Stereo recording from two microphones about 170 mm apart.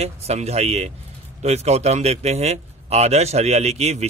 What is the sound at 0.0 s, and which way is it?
A man's voice, 40° right (ahead or behind).